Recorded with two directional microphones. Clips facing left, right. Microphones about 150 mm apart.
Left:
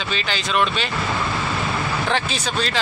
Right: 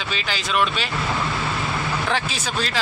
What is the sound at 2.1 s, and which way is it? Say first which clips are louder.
Speech: left 2 dB; 5° right (ahead or behind).